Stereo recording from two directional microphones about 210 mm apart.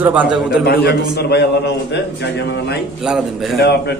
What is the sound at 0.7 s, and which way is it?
A man's voice, 50° left (ahead or behind).